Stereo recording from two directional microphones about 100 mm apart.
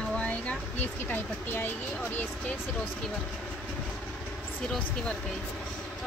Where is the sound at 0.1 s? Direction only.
15° left (ahead or behind).